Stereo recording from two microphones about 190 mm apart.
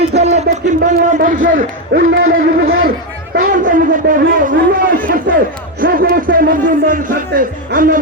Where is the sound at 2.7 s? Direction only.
90° right.